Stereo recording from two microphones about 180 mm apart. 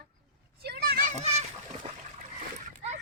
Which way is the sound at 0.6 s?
60° right (ahead or behind).